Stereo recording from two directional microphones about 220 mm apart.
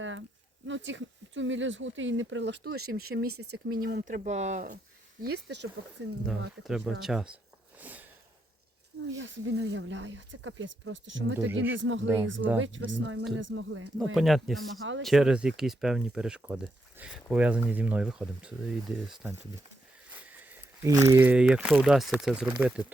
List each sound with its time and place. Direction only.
0.0 s a sound: 60° right (ahead or behind)
0.7 s speech: 55° right (ahead or behind)
3.3 s speech: 90° right
3.7 s speech: 45° right (ahead or behind)
5.2 s speech: 50° right (ahead or behind)
6.7 s speech: centre (ahead or behind)
7.8 s sniff: 5° right (ahead or behind)
9.0 s speech: 55° right (ahead or behind)
14.0 s speech: centre (ahead or behind)
14.8 s speech: 60° right (ahead or behind)
15.0 s speech: centre (ahead or behind)